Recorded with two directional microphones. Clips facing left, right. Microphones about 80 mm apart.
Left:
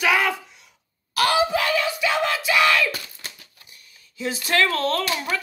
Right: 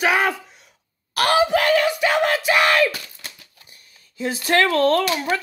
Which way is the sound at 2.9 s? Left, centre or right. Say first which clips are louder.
Left 1 dB; centre.